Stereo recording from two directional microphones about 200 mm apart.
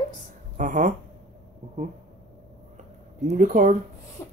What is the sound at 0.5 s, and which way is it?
Speech, 40° right (ahead or behind).